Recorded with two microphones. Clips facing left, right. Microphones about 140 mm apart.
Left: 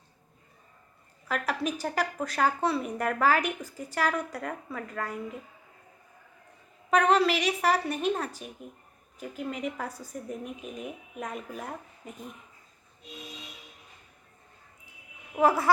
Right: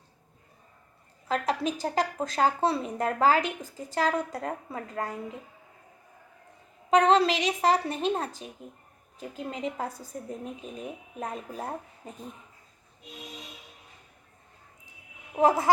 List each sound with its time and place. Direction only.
1.3 s a woman's voice: 25° right (ahead or behind)
6.9 s a woman's voice: 25° right (ahead or behind)
15.4 s a woman's voice: 20° right (ahead or behind)